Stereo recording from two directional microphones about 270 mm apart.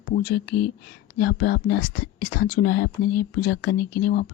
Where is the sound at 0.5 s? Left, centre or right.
Left.